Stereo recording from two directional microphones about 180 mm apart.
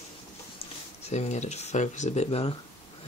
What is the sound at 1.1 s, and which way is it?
Speech, 40° left (ahead or behind).